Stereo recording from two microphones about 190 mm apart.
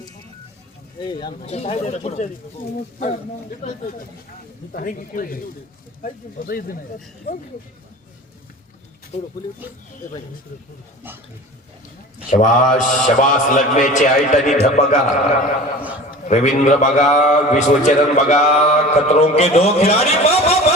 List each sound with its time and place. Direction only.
1.5 s a man's voice: 35° left (ahead or behind)
3.6 s a man's voice: 40° left (ahead or behind)
9.1 s a man's voice: 35° left (ahead or behind)
12.3 s a man's voice: 40° left (ahead or behind)